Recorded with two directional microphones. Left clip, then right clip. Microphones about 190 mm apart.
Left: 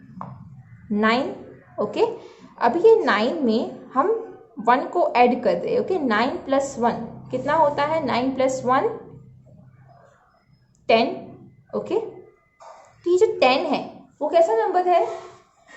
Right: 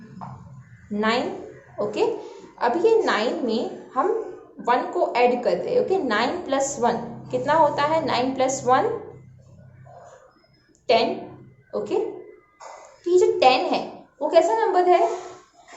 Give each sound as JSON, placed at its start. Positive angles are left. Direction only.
{"t": 0.9, "sound": "a woman's voice", "side_deg": 40}
{"t": 10.9, "sound": "a woman's voice", "side_deg": 45}
{"t": 13.1, "sound": "a woman's voice", "side_deg": 45}